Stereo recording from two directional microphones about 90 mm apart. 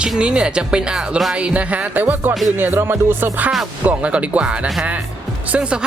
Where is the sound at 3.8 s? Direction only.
15° right (ahead or behind).